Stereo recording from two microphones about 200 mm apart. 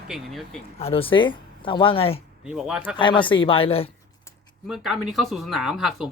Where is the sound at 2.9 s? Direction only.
25° left (ahead or behind).